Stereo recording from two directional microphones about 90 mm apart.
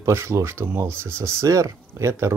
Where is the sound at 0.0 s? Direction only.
30° right (ahead or behind).